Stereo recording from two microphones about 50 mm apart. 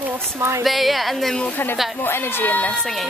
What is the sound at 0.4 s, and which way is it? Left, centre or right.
Speech, right.